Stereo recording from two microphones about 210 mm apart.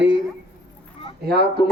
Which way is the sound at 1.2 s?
50° right (ahead or behind).